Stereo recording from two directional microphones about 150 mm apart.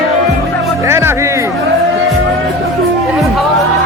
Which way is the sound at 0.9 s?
15° right (ahead or behind).